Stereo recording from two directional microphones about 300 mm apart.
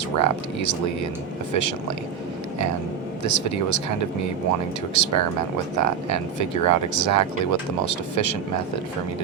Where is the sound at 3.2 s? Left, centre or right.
Left.